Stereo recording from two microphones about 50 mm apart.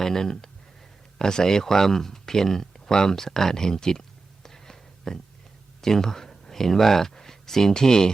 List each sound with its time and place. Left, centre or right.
0.0 s speech: centre
4.4 s a sound: centre
5.8 s speech: centre